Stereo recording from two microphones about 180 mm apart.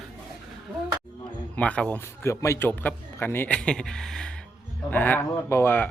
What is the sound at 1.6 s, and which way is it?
Speech, 5° left (ahead or behind).